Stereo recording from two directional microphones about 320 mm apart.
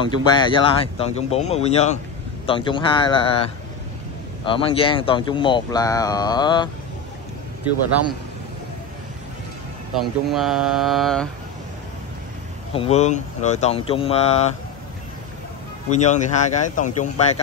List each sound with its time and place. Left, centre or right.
0.0 s speech: centre
4.5 s speech: centre
9.9 s speech: centre
12.7 s speech: centre
16.1 s speech: left